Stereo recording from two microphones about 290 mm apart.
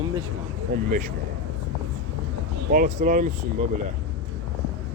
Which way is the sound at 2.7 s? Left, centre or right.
Right.